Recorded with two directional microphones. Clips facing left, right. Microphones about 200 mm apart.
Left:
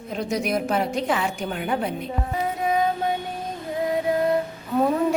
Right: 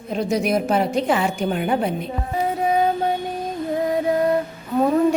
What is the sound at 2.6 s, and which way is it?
Music, 35° right (ahead or behind).